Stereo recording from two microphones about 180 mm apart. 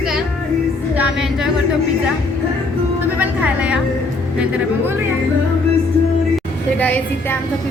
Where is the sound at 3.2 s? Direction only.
5° right (ahead or behind).